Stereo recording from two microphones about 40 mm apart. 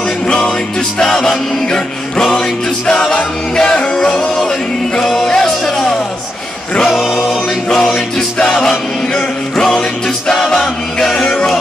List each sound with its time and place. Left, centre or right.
0.7 s music: centre
2.9 s a capella: centre
3.2 s music: left
5.0 s music: centre
6.9 s music: centre
7.7 s music: centre
10.2 s a capella: centre